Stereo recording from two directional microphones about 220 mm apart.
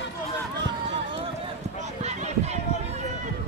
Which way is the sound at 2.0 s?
30° right (ahead or behind).